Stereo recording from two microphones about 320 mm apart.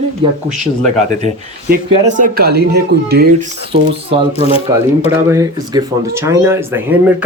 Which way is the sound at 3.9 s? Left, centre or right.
Centre.